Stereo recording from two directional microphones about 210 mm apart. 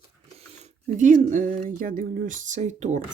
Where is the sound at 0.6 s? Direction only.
35° right (ahead or behind).